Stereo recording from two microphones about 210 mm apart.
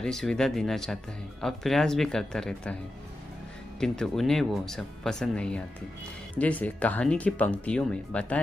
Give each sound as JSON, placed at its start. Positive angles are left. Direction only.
{"t": 0.0, "sound": "speech", "side_deg": 0}
{"t": 3.8, "sound": "speech", "side_deg": 5}